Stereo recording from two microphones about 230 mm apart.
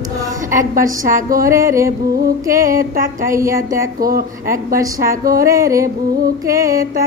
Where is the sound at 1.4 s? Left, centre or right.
Centre.